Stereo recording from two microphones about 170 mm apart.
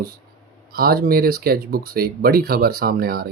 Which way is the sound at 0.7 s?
60° right (ahead or behind).